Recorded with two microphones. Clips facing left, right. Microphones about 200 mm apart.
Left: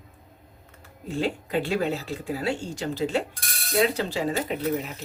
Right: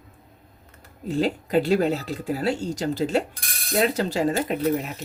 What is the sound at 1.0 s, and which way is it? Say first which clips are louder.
Speech: right 4 dB; 40° right (ahead or behind).